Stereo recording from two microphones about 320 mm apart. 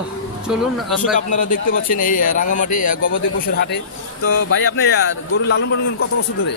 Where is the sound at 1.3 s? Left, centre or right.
Left.